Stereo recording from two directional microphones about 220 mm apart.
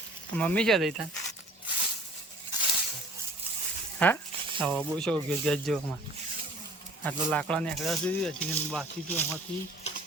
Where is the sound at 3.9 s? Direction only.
5° left (ahead or behind).